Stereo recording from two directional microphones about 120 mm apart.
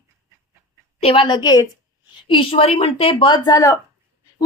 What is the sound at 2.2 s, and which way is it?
A woman's voice, 50° left (ahead or behind).